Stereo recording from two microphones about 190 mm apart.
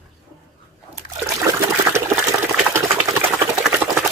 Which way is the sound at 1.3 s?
15° right (ahead or behind).